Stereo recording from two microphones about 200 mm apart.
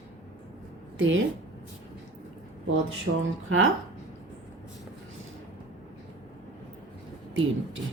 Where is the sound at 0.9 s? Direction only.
70° right (ahead or behind).